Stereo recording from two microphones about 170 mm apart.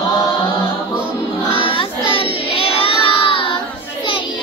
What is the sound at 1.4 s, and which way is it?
Child singing, 30° left (ahead or behind).